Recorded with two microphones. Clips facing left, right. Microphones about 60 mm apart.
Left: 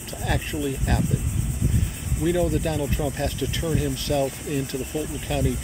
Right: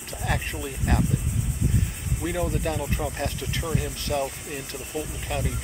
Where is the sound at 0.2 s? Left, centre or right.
Right.